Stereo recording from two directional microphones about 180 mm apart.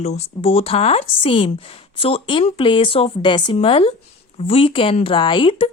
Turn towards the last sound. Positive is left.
turn(degrees=30)  # may be behind; listen again after turning